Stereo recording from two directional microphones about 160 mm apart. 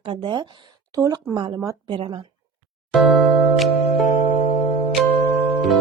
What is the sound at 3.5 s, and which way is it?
Music, centre (ahead or behind).